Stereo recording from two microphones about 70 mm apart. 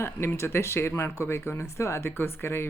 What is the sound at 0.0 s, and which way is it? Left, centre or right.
Speech, left.